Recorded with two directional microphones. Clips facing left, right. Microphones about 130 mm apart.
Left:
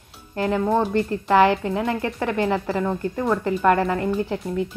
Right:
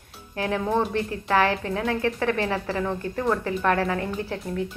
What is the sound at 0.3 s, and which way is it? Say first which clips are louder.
A woman's voice: left 4 dB; 5° left (ahead or behind).